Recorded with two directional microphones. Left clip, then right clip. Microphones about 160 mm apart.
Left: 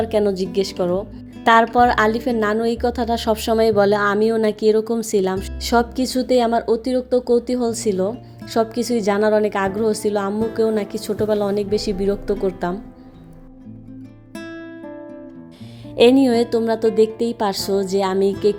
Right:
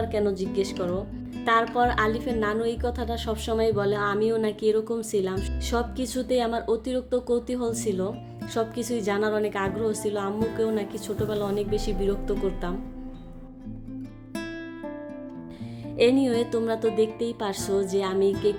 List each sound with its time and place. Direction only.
0.0 s a woman's voice: 40° left (ahead or behind)
16.0 s speech: 40° left (ahead or behind)